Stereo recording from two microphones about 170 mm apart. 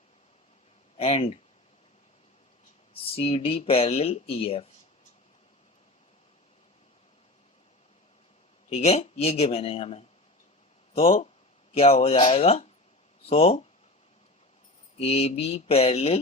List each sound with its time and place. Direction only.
0.9 s speech: 35° left (ahead or behind)
3.2 s speech: 35° left (ahead or behind)
8.7 s speech: 40° left (ahead or behind)
14.9 s speech: 35° left (ahead or behind)